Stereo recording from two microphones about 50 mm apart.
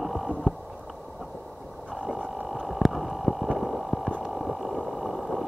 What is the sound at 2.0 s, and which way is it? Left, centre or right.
Sewing machine, centre.